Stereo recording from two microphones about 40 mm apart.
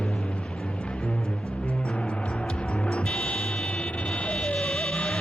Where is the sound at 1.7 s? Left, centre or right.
Left.